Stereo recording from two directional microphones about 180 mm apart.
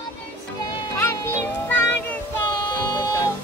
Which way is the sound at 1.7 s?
10° left (ahead or behind).